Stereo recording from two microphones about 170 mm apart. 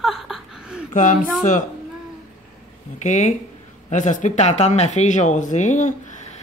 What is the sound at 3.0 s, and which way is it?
Speech, 45° left (ahead or behind).